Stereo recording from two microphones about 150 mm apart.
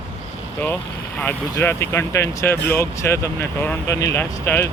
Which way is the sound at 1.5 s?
15° left (ahead or behind).